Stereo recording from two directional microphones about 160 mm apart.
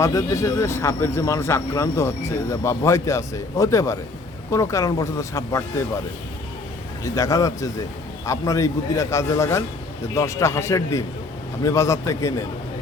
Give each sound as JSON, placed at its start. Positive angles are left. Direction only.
{"t": 0.0, "sound": "speech", "side_deg": 20}
{"t": 7.0, "sound": "speech", "side_deg": 20}